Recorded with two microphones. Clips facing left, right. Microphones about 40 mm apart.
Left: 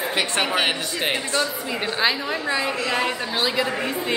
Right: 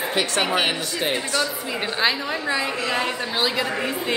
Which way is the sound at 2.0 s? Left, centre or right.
Centre.